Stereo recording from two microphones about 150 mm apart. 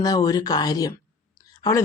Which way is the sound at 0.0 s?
25° left (ahead or behind).